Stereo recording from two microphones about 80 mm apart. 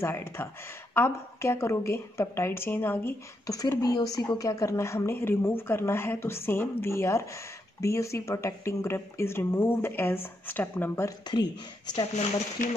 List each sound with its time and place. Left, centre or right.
0.0 s speech: left
3.4 s speech: left
11.2 s speech: left